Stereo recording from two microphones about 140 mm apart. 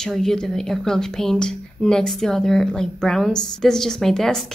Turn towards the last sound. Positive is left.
turn(degrees=5)  # may be behind; listen again after turning